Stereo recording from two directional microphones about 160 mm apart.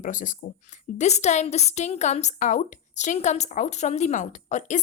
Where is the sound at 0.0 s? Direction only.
55° left (ahead or behind).